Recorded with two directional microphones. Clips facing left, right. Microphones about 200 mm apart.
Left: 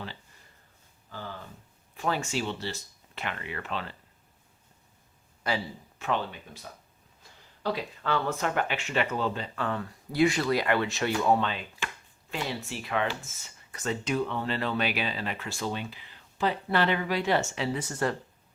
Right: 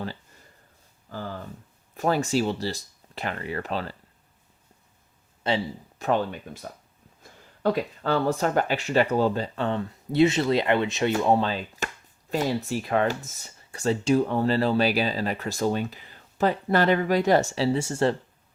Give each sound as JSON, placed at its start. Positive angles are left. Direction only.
{"t": 2.0, "sound": "speech", "side_deg": -40}
{"t": 5.4, "sound": "speech", "side_deg": -25}
{"t": 6.0, "sound": "speech", "side_deg": -45}
{"t": 7.2, "sound": "a sound", "side_deg": -50}
{"t": 8.1, "sound": "speech", "side_deg": -35}
{"t": 11.3, "sound": "speech", "side_deg": -35}